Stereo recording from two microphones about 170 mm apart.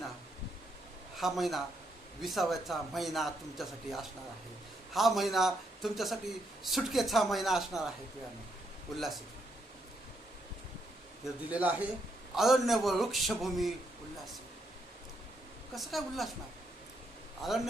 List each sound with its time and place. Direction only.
1.1 s speech: centre (ahead or behind)
9.0 s speech: centre (ahead or behind)
11.4 s a man's voice: 10° right (ahead or behind)
15.7 s speech: centre (ahead or behind)
17.4 s speech: centre (ahead or behind)